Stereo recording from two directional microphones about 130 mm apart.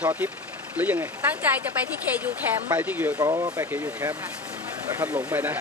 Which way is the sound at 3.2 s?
30° right (ahead or behind).